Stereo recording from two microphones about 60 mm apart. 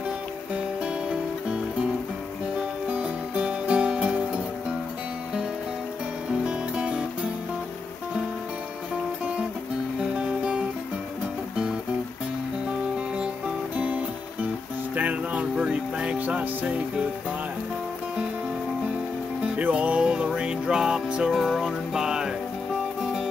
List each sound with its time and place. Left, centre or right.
2.9 s music: centre
6.4 s music: centre
10.1 s music: centre
15.0 s music: right
15.5 s music: centre
19.4 s music: right